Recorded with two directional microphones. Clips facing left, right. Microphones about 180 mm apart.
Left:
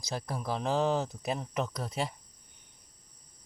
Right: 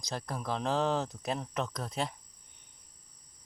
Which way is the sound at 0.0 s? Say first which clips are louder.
Left 1 dB; 5° left (ahead or behind).